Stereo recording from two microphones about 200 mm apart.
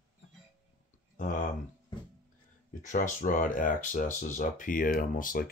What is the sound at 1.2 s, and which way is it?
Speech, 40° left (ahead or behind).